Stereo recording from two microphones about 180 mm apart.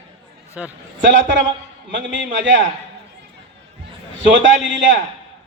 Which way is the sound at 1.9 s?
80° right.